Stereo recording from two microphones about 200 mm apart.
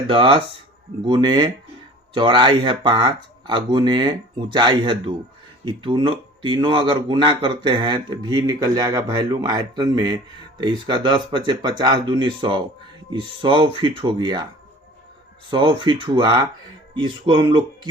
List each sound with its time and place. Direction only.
0.0 s speech: 25° right (ahead or behind)
15.4 s speech: 25° right (ahead or behind)